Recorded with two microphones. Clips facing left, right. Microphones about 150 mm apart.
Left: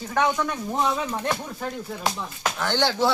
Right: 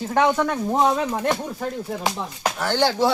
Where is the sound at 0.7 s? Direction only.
45° right (ahead or behind).